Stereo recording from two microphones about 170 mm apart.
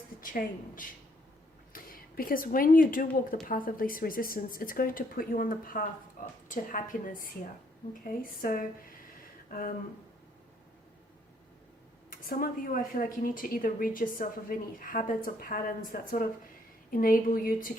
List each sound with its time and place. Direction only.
0.2 s a woman's voice: 55° left (ahead or behind)
12.1 s speech: 55° left (ahead or behind)